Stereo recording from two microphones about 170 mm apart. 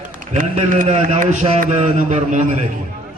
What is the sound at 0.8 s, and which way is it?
A man's voice, 40° right (ahead or behind).